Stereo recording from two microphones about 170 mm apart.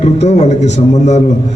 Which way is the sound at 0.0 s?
40° left (ahead or behind).